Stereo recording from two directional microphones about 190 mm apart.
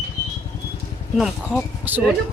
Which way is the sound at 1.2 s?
5° right (ahead or behind).